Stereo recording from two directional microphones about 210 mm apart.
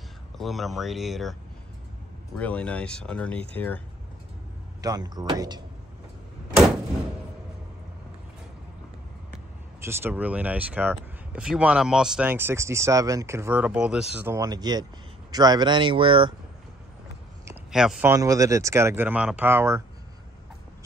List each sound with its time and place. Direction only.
0.4 s speech: centre (ahead or behind)
2.3 s speech: 5° left (ahead or behind)
4.8 s speech: 20° right (ahead or behind)
9.8 s speech: 10° right (ahead or behind)
17.6 s speech: 5° right (ahead or behind)
18.1 s speech: 15° right (ahead or behind)